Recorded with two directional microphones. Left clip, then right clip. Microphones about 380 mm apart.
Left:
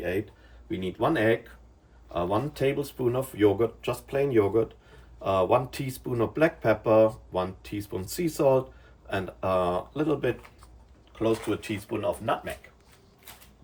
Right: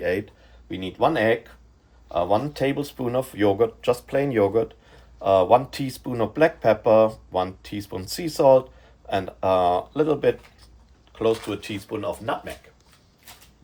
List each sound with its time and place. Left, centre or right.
0.7 s speech: centre
11.3 s speech: centre